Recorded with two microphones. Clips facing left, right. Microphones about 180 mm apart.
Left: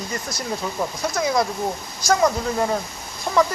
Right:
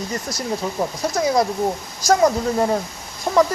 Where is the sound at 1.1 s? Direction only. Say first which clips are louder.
Right 3 dB; 35° right (ahead or behind).